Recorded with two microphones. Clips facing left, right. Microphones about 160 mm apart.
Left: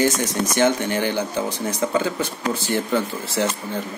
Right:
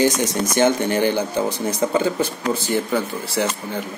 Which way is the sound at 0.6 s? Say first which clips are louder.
Right 3 dB; 35° right (ahead or behind).